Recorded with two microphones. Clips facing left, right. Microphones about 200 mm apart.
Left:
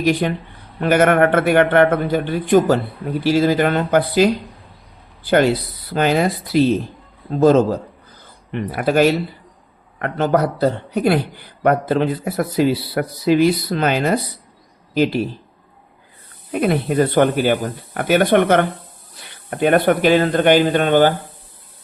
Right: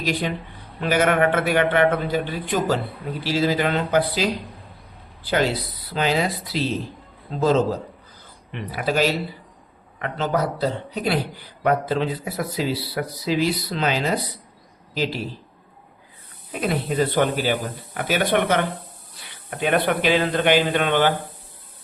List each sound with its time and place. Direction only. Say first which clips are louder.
0.0 s speech: left 7 dB; 55° left (ahead or behind)
16.5 s speech: left 6 dB; 55° left (ahead or behind)